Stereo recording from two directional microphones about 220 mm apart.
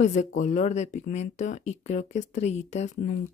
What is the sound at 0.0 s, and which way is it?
Speech, 35° left (ahead or behind).